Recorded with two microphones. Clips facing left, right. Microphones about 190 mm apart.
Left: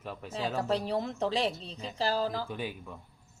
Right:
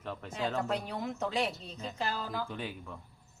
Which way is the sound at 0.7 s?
30° left (ahead or behind).